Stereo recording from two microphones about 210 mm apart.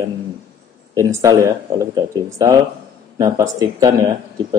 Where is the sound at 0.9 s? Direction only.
15° right (ahead or behind).